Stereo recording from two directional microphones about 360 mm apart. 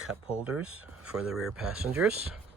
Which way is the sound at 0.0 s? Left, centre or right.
Centre.